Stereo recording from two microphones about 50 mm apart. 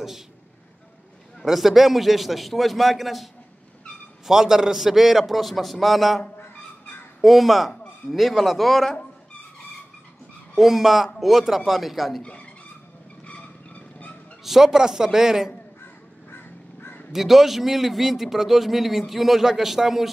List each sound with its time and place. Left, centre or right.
1.4 s a man's voice: centre
4.3 s a man's voice: centre
10.5 s a man's voice: centre
12.2 s speech: left
13.3 s vehicle: left
14.4 s a man's voice: centre
16.3 s crow: left
17.1 s a man's voice: centre